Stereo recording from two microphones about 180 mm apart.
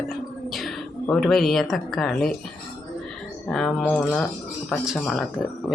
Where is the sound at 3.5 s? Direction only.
Centre (ahead or behind).